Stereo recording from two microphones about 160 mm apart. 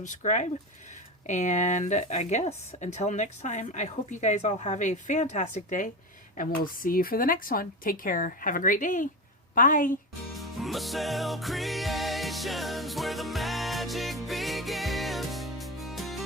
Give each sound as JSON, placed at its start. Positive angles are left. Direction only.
{"t": 0.0, "sound": "speech", "side_deg": 50}
{"t": 6.8, "sound": "speech", "side_deg": 65}
{"t": 10.6, "sound": "music", "side_deg": 0}